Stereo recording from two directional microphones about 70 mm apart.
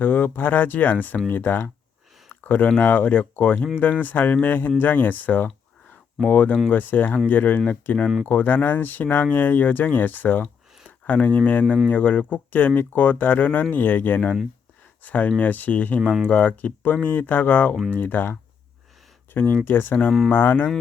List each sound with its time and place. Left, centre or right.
0.0 s speech: left
16.0 s speech: centre
16.3 s speech: left
20.1 s speech: centre
20.3 s speech: left